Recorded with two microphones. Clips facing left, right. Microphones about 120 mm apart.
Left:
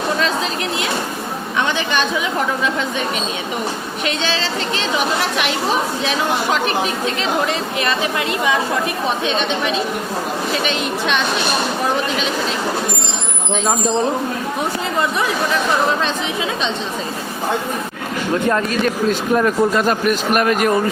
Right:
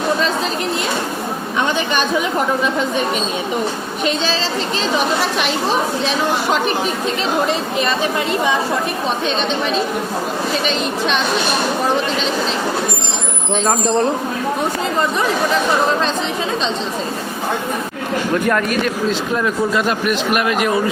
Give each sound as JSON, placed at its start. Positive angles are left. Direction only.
{"t": 4.0, "sound": "a woman's voice", "side_deg": -35}
{"t": 10.7, "sound": "a woman's voice", "side_deg": 0}
{"t": 18.4, "sound": "speech", "side_deg": 30}
{"t": 19.4, "sound": "a man's voice", "side_deg": 40}